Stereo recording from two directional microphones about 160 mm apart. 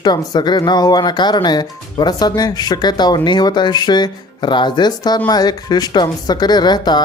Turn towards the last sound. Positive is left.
turn(degrees=25)  # may be behind; listen again after turning